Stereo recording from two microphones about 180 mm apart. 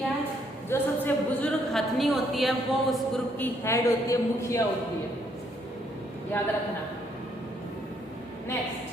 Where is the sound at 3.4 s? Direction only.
15° left (ahead or behind).